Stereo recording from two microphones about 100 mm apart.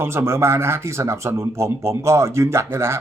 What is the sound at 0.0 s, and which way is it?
Speech, 25° right (ahead or behind).